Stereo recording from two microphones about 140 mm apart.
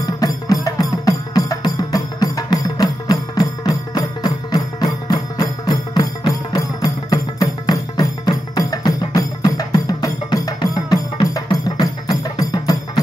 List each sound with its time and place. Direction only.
0.0 s music: 25° left (ahead or behind)